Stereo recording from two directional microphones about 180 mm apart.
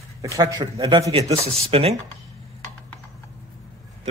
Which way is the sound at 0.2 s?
20° right (ahead or behind).